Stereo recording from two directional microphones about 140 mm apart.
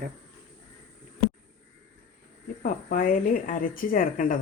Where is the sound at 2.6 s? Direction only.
75° left (ahead or behind).